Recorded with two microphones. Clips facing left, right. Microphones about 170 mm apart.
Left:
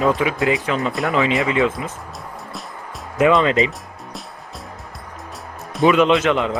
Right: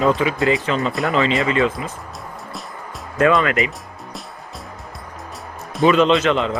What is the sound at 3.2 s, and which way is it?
Speech, 20° left (ahead or behind).